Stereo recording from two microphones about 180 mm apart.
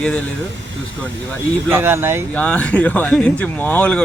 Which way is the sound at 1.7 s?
10° right (ahead or behind).